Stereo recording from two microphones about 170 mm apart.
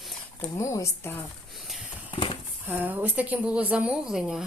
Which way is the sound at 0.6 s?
15° left (ahead or behind).